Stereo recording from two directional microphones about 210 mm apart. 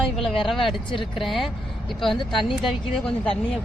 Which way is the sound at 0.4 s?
Centre (ahead or behind).